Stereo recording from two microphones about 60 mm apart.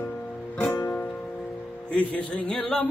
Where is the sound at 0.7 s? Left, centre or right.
Left.